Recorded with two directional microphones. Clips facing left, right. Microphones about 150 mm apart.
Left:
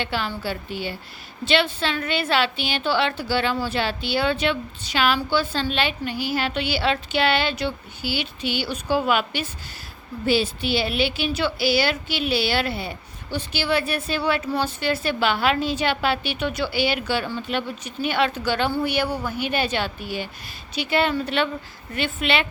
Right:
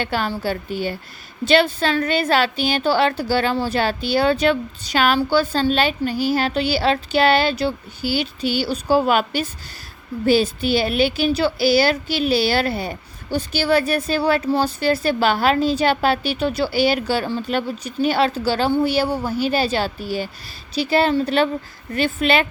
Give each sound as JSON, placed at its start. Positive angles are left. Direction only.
{"t": 0.0, "sound": "a woman's voice", "side_deg": -45}